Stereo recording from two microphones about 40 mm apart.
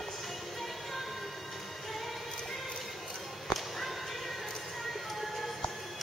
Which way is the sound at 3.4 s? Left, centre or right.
Centre.